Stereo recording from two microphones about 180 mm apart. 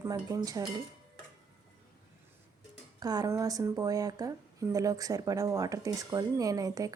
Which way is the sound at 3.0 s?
20° right (ahead or behind).